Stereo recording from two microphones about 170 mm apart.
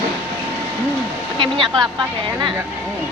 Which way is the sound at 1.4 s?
30° right (ahead or behind).